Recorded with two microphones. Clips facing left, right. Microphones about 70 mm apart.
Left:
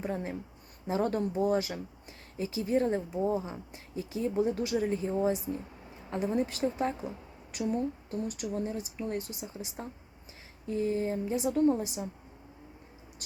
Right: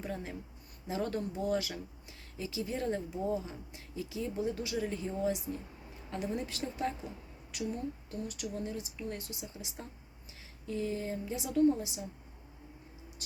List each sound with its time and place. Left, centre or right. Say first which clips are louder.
0.0 s a woman's voice: left 5 dB; left
4.9 s a woman's voice: left 5 dB; left